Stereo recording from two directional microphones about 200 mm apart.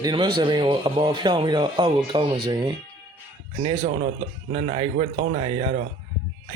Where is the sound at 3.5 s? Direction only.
25° right (ahead or behind).